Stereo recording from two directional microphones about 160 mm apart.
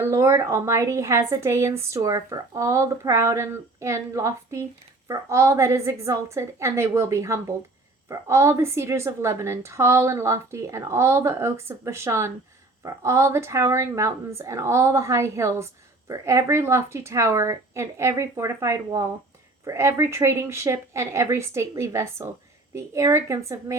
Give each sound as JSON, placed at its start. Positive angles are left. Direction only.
{"t": 0.0, "sound": "a woman's voice", "side_deg": -15}